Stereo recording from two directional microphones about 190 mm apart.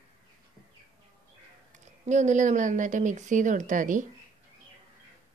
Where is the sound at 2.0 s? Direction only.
35° right (ahead or behind).